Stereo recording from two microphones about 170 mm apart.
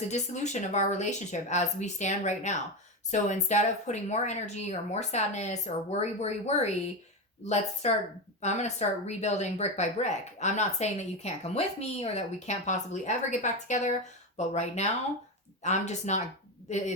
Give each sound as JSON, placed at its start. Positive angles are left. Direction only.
{"t": 0.1, "sound": "speech", "side_deg": 45}